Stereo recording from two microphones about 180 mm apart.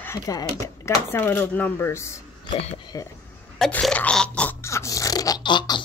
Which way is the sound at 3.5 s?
Centre (ahead or behind).